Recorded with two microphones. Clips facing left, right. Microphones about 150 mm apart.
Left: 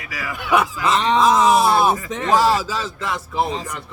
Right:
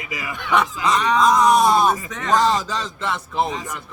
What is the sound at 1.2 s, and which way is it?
A man's voice, 5° left (ahead or behind).